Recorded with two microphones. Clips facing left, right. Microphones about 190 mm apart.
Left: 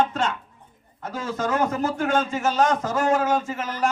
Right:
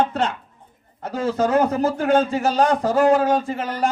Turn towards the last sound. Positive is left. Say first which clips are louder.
# right 3 dB
turn(degrees=-35)  # may be behind; listen again after turning